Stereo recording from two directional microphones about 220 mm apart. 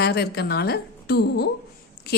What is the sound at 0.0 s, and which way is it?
A woman's voice, 45° left (ahead or behind).